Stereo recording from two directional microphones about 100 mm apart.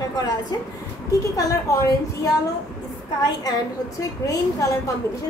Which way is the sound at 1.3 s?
35° left (ahead or behind).